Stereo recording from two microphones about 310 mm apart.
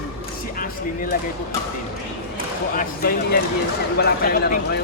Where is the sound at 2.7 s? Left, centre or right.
Left.